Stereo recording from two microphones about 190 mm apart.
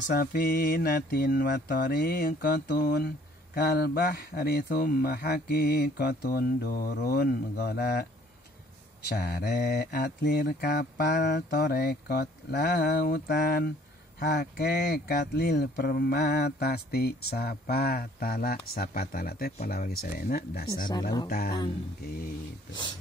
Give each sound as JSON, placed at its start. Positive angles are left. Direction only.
{"t": 0.1, "sound": "speech", "side_deg": 55}
{"t": 9.1, "sound": "speech", "side_deg": 60}